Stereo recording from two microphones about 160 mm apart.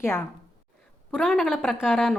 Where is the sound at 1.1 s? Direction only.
Centre (ahead or behind).